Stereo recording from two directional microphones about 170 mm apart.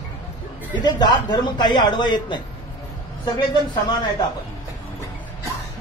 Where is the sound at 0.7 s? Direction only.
25° left (ahead or behind).